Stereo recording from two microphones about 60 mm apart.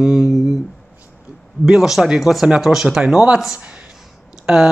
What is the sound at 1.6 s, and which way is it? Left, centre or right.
Speech, centre.